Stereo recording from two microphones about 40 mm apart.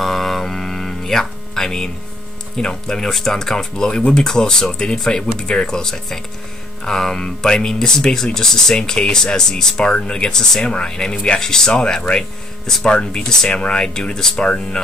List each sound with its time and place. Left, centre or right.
0.0 s music: centre
2.5 s speech: centre